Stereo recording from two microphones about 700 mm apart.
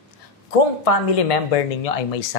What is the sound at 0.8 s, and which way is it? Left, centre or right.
Speech, left.